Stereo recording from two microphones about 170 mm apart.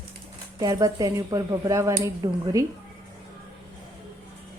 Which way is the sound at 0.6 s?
20° right (ahead or behind).